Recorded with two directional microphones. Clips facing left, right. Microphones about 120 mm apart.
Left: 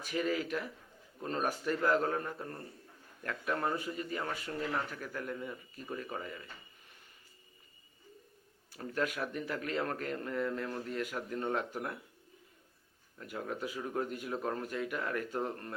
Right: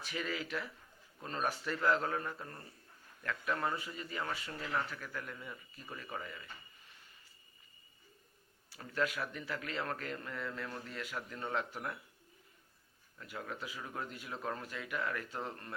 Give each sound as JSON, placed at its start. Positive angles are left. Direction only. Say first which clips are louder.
{"t": 0.0, "sound": "a man's voice", "louder": "left 6 dB", "side_deg": 45}
{"t": 3.6, "sound": "a man's voice", "louder": "left 3 dB", "side_deg": 50}
{"t": 8.7, "sound": "a man's voice", "louder": "left 1 dB", "side_deg": 45}
{"t": 13.1, "sound": "a man's voice", "louder": "left 5 dB", "side_deg": 45}